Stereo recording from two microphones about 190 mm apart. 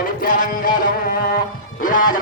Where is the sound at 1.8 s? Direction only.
45° left (ahead or behind).